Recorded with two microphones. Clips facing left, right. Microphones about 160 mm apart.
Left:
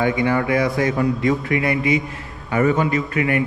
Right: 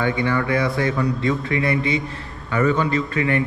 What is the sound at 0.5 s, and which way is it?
A man's voice, 30° right (ahead or behind).